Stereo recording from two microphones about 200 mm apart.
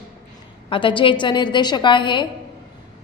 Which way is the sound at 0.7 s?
25° left (ahead or behind).